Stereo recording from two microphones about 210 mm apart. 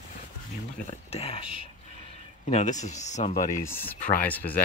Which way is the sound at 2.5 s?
35° left (ahead or behind).